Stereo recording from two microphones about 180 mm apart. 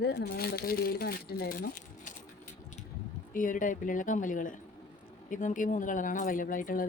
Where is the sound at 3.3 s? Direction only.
50° left (ahead or behind).